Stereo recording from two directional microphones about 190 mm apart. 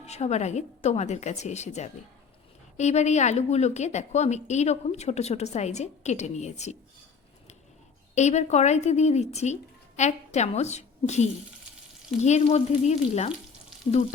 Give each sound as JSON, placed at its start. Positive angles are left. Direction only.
{"t": 0.0, "sound": "a woman's voice", "side_deg": 35}
{"t": 8.1, "sound": "a woman's voice", "side_deg": 35}